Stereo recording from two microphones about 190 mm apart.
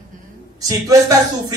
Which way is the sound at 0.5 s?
20° right (ahead or behind).